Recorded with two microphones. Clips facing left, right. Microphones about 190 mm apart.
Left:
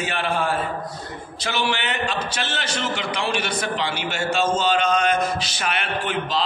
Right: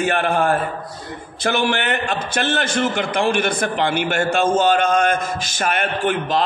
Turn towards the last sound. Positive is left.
turn(degrees=-50)  # may be behind; listen again after turning